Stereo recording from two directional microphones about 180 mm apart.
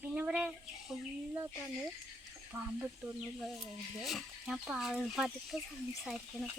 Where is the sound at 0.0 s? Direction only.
10° right (ahead or behind).